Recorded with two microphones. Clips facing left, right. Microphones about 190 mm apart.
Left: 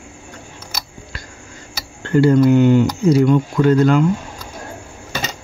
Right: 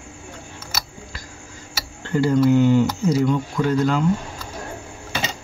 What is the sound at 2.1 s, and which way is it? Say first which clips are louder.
Speech: left 5 dB; 65° left (ahead or behind).